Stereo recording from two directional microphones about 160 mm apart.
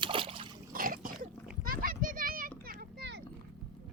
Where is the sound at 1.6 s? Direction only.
65° right (ahead or behind).